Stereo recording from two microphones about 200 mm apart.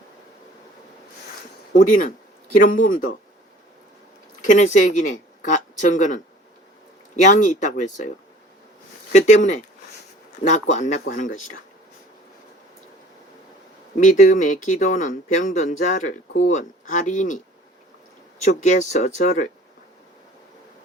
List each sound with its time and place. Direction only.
1.7 s speech: 40° left (ahead or behind)
4.4 s speech: 40° left (ahead or behind)
7.2 s speech: 40° left (ahead or behind)
9.1 s speech: 35° left (ahead or behind)
13.9 s speech: 40° left (ahead or behind)
18.9 s speech: 35° left (ahead or behind)